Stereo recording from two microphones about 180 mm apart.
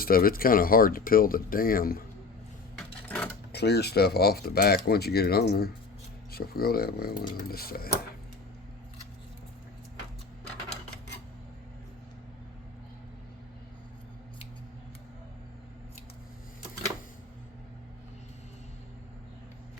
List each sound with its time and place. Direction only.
0.0 s speech: 55° left (ahead or behind)
2.7 s a sound: 5° left (ahead or behind)
3.5 s speech: 65° left (ahead or behind)